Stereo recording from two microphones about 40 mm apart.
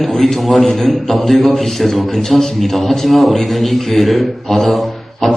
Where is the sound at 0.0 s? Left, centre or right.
Centre.